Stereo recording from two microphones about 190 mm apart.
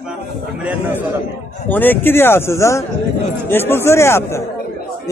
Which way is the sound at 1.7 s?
10° left (ahead or behind).